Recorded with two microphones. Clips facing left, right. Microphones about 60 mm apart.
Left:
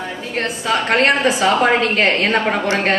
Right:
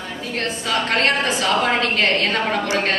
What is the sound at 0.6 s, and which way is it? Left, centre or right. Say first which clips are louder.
A woman's voice: left 4 dB; left.